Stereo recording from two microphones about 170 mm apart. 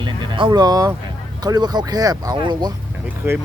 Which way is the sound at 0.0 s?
30° right (ahead or behind).